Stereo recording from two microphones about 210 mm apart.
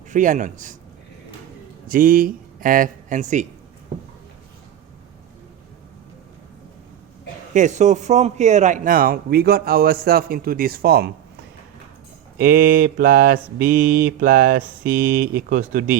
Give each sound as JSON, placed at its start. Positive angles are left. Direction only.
{"t": 0.1, "sound": "speech", "side_deg": -35}
{"t": 1.9, "sound": "speech", "side_deg": -40}
{"t": 7.5, "sound": "a man's voice", "side_deg": -35}
{"t": 12.4, "sound": "a man's voice", "side_deg": -45}